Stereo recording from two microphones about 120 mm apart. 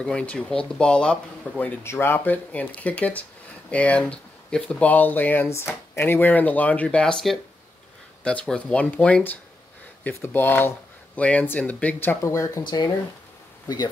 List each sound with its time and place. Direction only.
0.0 s speech: 10° left (ahead or behind)
1.8 s speech: 20° left (ahead or behind)
12.2 s speech: 25° left (ahead or behind)
12.6 s speech: 35° left (ahead or behind)